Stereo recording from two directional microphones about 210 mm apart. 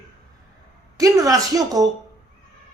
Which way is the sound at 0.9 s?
15° right (ahead or behind).